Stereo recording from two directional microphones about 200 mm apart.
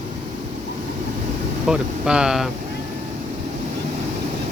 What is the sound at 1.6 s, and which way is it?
Speech, 5° right (ahead or behind).